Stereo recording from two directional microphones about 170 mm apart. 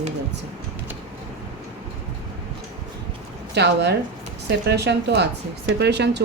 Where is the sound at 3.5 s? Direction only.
85° right.